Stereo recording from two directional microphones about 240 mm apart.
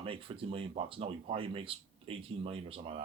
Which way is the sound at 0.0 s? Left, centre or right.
Right.